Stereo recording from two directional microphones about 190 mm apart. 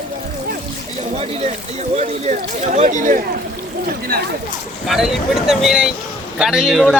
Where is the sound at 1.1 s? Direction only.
35° right (ahead or behind).